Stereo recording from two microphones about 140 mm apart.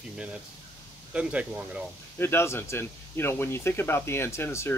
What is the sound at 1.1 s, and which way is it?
Speech, 10° right (ahead or behind).